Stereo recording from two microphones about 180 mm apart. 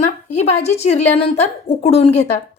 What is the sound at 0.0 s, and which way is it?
A woman's voice, 40° left (ahead or behind).